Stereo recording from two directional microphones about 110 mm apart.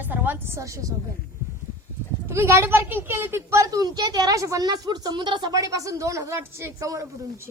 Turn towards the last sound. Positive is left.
turn(degrees=-30)  # may be behind; listen again after turning